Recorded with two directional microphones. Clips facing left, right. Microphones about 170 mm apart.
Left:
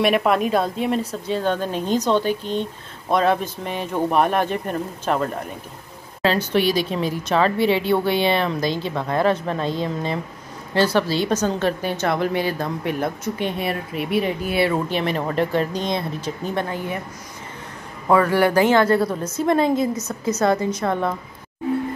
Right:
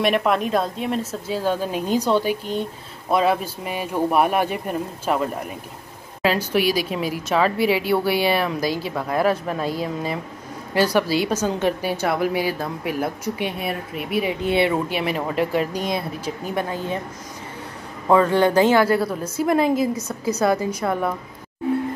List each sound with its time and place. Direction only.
0.0 s a woman's voice: centre (ahead or behind)
14.4 s speech: 25° right (ahead or behind)
14.9 s speech: 5° right (ahead or behind)
18.1 s speech: 20° right (ahead or behind)
18.8 s a woman's voice: 5° right (ahead or behind)
20.0 s a woman's voice: 30° right (ahead or behind)
20.3 s speech: 10° right (ahead or behind)